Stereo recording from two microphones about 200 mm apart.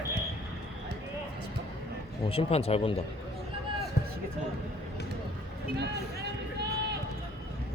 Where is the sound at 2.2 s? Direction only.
30° left (ahead or behind).